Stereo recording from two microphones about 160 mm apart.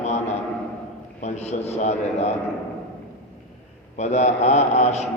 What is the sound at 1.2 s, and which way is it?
Speech, 45° left (ahead or behind).